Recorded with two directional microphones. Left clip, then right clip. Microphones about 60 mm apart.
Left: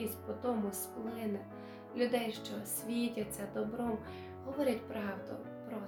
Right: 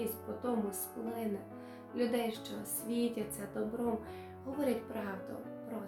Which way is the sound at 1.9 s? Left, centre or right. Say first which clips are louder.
Even; left.